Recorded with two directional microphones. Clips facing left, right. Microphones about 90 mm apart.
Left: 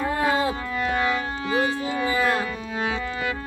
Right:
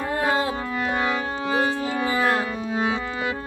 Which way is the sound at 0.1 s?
30° right (ahead or behind).